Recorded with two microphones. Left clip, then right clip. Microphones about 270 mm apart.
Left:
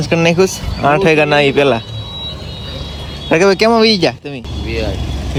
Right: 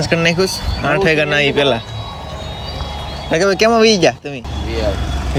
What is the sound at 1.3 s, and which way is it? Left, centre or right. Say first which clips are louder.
Speech: left 3 dB; left.